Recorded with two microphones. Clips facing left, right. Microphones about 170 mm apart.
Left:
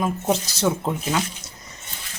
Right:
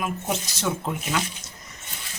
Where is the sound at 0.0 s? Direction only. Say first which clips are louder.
Left 6 dB; 30° left (ahead or behind).